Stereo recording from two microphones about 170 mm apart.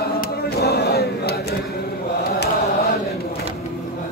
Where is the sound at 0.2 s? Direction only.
70° left (ahead or behind).